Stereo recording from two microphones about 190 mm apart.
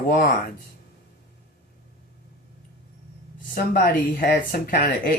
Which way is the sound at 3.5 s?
50° left (ahead or behind).